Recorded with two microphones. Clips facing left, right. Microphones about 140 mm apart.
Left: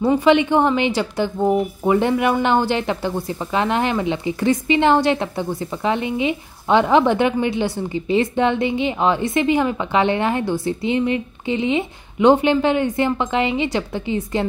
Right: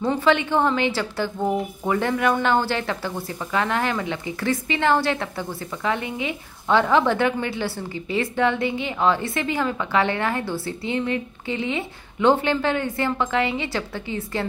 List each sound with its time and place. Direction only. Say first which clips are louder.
0.0 s a woman's voice: left 5 dB; 15° left (ahead or behind)